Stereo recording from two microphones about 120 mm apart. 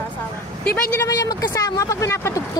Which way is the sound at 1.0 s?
30° left (ahead or behind).